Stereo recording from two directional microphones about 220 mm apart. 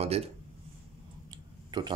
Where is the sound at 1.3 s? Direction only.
20° right (ahead or behind).